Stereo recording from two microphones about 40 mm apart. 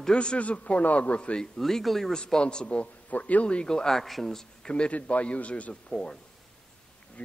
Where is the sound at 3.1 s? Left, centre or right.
Left.